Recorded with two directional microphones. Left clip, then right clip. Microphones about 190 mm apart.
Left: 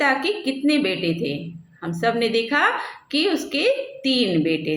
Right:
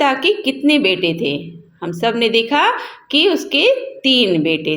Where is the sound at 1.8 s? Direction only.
30° right (ahead or behind).